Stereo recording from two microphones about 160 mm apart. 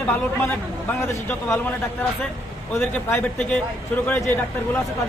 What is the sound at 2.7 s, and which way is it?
Speech, 10° left (ahead or behind).